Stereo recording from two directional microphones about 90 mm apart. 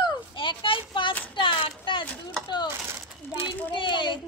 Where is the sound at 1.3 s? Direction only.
65° left (ahead or behind).